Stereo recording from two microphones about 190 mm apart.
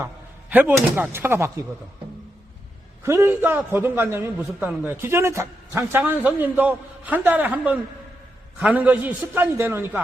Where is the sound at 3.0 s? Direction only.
15° right (ahead or behind).